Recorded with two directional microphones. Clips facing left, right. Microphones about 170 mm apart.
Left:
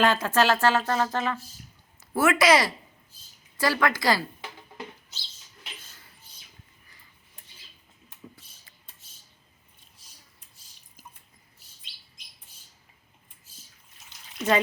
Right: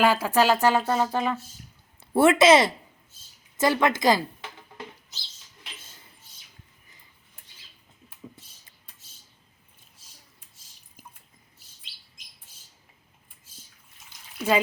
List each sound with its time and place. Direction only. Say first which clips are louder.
0.0 s speech: right 1 dB; 10° right (ahead or behind)
2.0 s a woman's voice: right 5 dB; 30° right (ahead or behind)
14.3 s speech: even; 10° right (ahead or behind)